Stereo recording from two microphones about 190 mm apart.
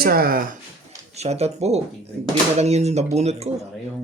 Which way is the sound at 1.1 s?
35° right (ahead or behind).